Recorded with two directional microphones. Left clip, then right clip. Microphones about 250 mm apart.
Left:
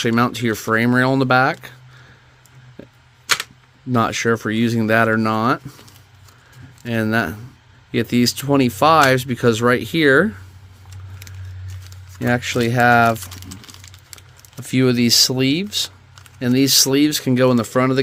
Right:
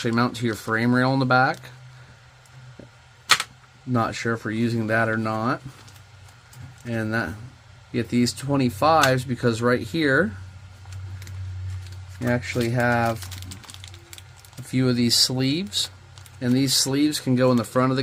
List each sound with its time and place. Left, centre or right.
0.0 s speech: left
3.9 s speech: left
6.8 s speech: left
12.2 s speech: left
14.7 s speech: left